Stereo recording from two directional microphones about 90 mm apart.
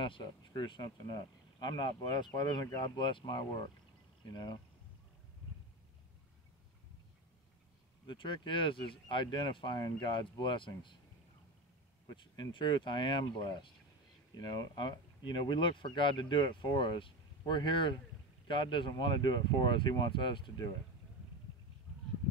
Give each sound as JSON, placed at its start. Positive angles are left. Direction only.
{"t": 0.0, "sound": "speech", "side_deg": 65}
{"t": 0.5, "sound": "speech", "side_deg": 55}
{"t": 8.1, "sound": "speech", "side_deg": 65}
{"t": 9.8, "sound": "speech", "side_deg": 45}
{"t": 10.3, "sound": "speech", "side_deg": 65}
{"t": 12.2, "sound": "speech", "side_deg": 60}